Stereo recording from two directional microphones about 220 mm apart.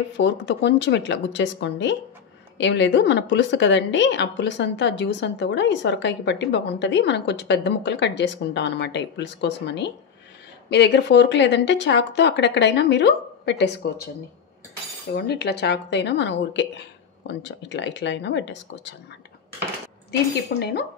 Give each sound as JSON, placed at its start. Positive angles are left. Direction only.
{"t": 0.2, "sound": "a woman's voice", "side_deg": 55}
{"t": 15.1, "sound": "a woman's voice", "side_deg": 45}
{"t": 20.1, "sound": "a woman's voice", "side_deg": 50}